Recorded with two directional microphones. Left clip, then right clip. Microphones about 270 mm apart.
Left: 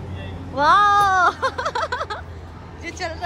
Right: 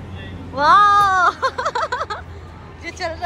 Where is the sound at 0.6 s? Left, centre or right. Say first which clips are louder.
Right 3 dB; centre.